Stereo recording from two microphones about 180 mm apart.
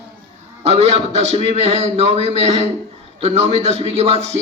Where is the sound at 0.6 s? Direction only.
35° right (ahead or behind).